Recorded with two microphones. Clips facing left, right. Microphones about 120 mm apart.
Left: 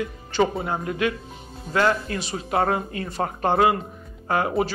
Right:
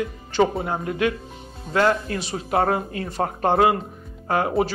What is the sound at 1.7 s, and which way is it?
Speech, 35° right (ahead or behind).